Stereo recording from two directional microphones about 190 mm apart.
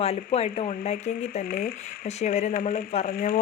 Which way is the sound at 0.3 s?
30° left (ahead or behind).